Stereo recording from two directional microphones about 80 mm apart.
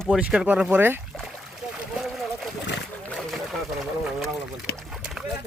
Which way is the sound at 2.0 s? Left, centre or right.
Centre.